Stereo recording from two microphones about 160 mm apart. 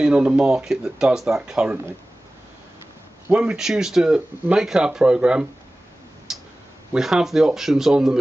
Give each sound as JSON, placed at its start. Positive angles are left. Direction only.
{"t": 0.0, "sound": "speech", "side_deg": -5}
{"t": 3.3, "sound": "speech", "side_deg": -5}
{"t": 6.3, "sound": "tick-tock", "side_deg": -5}
{"t": 6.9, "sound": "speech", "side_deg": -5}